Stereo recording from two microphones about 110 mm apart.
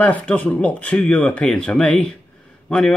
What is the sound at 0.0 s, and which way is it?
Speech, 15° left (ahead or behind).